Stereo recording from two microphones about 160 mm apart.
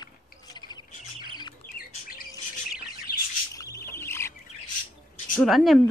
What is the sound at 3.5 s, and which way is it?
Bird, 20° left (ahead or behind).